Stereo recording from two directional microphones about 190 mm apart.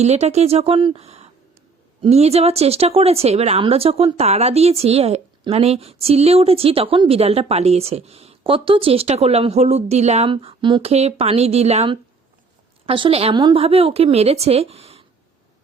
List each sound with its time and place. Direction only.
0.0 s speech: 35° right (ahead or behind)